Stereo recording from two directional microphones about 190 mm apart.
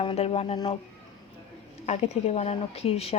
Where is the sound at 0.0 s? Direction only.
30° left (ahead or behind).